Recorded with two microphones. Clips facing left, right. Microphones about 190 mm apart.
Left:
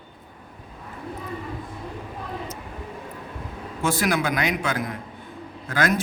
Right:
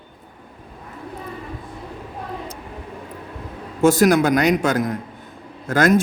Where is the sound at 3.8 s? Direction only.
45° right (ahead or behind).